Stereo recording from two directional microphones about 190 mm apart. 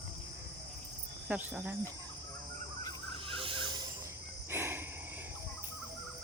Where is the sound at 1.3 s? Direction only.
10° right (ahead or behind).